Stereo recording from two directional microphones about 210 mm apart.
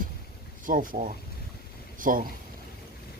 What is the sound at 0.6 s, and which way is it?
Speech, 40° right (ahead or behind).